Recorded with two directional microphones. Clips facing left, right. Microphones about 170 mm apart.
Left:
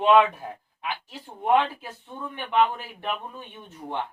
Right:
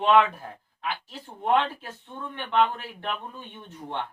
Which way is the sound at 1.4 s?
10° left (ahead or behind).